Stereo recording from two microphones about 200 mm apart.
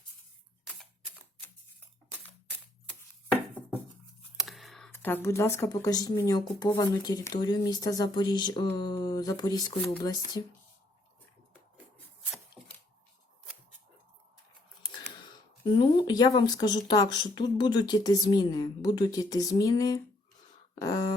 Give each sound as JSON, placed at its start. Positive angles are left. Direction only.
{"t": 4.4, "sound": "a sound", "side_deg": 0}
{"t": 4.9, "sound": "speech", "side_deg": 10}
{"t": 15.6, "sound": "speech", "side_deg": 25}